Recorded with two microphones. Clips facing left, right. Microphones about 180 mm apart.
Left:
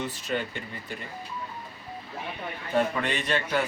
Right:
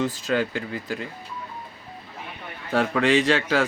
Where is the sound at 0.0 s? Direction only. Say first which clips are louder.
Right 7 dB; 90° right.